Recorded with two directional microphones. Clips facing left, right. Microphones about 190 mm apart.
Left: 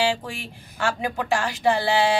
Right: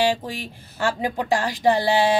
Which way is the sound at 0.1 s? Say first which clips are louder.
Right 2 dB; 35° right (ahead or behind).